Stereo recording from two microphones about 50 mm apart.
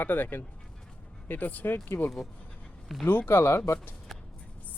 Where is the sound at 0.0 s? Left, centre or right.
Left.